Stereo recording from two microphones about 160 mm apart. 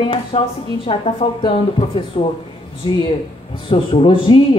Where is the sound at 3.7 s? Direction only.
35° left (ahead or behind).